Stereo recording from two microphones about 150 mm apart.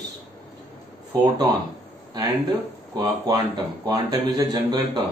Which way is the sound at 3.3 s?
25° right (ahead or behind).